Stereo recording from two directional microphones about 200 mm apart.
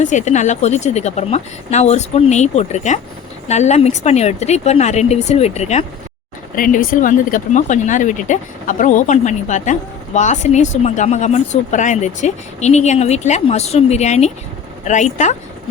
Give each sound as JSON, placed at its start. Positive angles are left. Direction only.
{"t": 0.0, "sound": "speech", "side_deg": 35}